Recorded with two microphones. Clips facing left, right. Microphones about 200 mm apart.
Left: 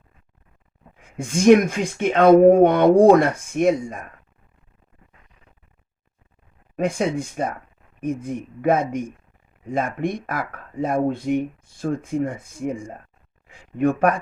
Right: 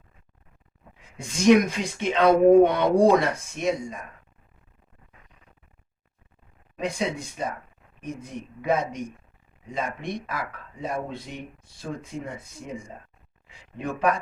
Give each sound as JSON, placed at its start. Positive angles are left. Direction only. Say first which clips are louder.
{"t": 0.9, "sound": "speech", "louder": "left 8 dB", "side_deg": 50}
{"t": 6.7, "sound": "speech", "louder": "left 6 dB", "side_deg": 55}